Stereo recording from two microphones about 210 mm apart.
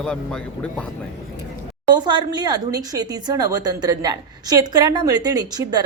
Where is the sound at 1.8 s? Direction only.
20° right (ahead or behind).